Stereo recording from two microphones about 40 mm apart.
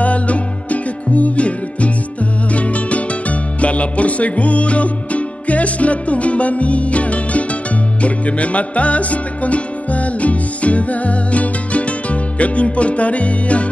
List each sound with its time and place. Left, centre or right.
0.0 s music: left